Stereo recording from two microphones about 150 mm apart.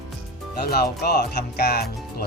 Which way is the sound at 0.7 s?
90° left.